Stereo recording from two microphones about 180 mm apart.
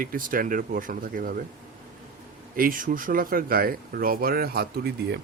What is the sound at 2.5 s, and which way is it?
A man's voice, 50° right (ahead or behind).